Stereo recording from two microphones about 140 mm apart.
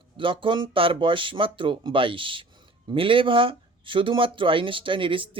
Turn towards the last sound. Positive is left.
turn(degrees=-40)  # may be behind; listen again after turning